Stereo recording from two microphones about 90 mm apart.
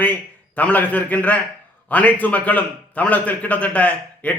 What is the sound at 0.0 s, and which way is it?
A man's voice, 20° left (ahead or behind).